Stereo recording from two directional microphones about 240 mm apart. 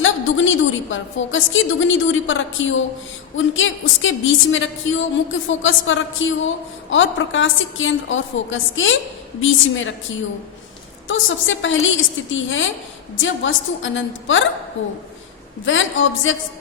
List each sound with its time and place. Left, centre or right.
0.0 s a woman's voice: left
11.1 s a woman's voice: left